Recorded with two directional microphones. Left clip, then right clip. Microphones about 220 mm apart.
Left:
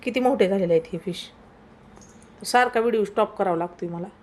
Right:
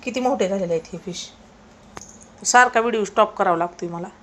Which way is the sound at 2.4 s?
20° left (ahead or behind).